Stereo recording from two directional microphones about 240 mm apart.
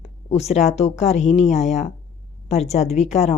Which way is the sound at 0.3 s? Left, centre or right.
Left.